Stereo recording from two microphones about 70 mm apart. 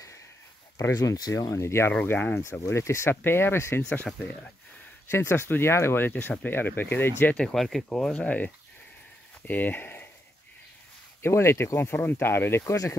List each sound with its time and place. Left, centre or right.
0.7 s speech: left
1.5 s speech: left
1.9 s speech: left
2.6 s speech: left
3.9 s speech: left
5.1 s speech: left
7.3 s speech: centre; by 10.0 s left
11.2 s speech: left
12.6 s speech: left